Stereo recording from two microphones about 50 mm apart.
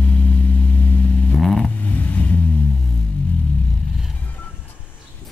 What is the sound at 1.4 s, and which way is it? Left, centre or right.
Vehicle, centre.